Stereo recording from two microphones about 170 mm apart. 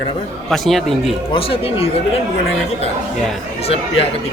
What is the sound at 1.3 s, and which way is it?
Speech, 35° left (ahead or behind).